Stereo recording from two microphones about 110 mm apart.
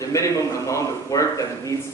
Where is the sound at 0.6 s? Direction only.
30° left (ahead or behind).